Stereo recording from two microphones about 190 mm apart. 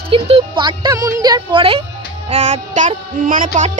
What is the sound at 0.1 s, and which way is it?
A woman's voice, 25° right (ahead or behind).